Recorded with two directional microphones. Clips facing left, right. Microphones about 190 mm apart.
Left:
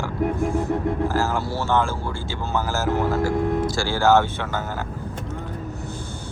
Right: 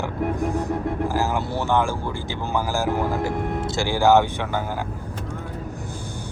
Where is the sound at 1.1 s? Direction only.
15° right (ahead or behind).